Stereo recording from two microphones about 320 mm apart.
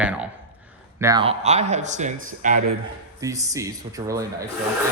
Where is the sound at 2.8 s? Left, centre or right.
Centre.